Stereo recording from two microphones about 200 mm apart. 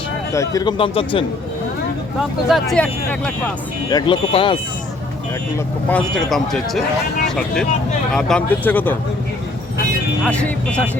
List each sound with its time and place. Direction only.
0.3 s speech: 20° left (ahead or behind)
2.5 s speech: 5° left (ahead or behind)
3.8 s speech: 20° left (ahead or behind)
5.9 s speech: centre (ahead or behind)
10.2 s speech: 5° left (ahead or behind)